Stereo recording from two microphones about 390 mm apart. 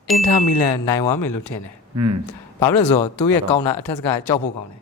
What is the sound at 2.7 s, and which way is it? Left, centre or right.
Speech, left.